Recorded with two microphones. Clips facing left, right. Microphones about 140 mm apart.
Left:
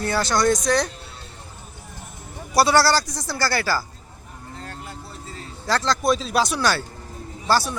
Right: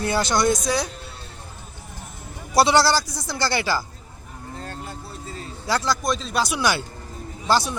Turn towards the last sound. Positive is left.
turn(degrees=-20)  # may be behind; listen again after turning